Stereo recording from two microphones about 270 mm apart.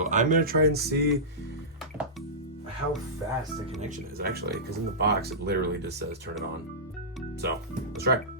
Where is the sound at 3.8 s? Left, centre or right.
Right.